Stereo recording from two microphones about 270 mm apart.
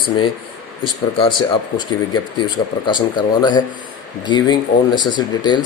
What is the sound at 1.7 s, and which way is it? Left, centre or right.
Speech, centre.